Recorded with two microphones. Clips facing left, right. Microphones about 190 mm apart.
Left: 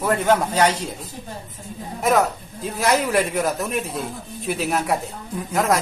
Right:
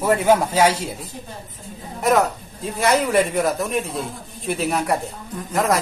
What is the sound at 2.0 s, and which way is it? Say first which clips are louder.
Speech: right 1 dB; centre (ahead or behind).